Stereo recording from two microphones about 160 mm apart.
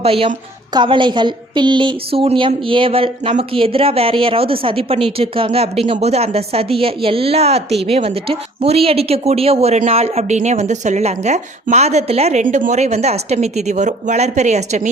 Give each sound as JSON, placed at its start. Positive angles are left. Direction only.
{"t": 0.0, "sound": "a woman's voice", "side_deg": -35}